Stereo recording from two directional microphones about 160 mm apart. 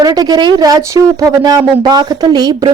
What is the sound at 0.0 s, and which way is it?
Speech, 25° right (ahead or behind).